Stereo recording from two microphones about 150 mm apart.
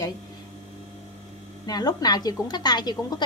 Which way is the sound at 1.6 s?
25° left (ahead or behind).